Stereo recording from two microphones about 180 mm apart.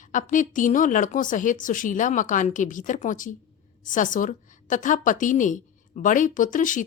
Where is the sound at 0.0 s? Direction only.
45° left (ahead or behind).